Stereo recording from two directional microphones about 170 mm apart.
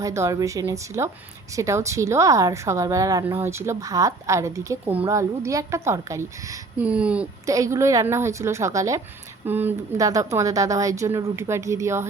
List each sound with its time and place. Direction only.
0.0 s a woman's voice: 20° right (ahead or behind)
6.8 s a woman's voice: 5° right (ahead or behind)
7.4 s a woman's voice: 20° right (ahead or behind)